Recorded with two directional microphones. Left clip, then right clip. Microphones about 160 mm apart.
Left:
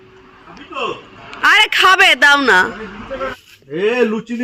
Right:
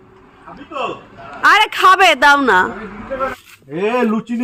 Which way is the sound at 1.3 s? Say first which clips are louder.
Even; 10° right (ahead or behind).